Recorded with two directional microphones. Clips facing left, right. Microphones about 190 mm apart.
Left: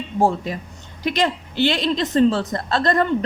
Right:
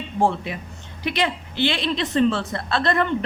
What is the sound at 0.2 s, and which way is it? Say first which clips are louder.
A woman's voice: left 2 dB; 40° left (ahead or behind).